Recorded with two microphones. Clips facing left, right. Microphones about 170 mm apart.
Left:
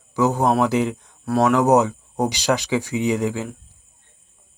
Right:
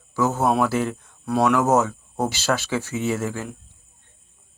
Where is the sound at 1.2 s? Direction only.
Centre (ahead or behind).